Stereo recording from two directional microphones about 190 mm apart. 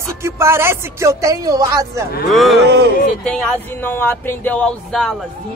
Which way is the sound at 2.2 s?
Centre (ahead or behind).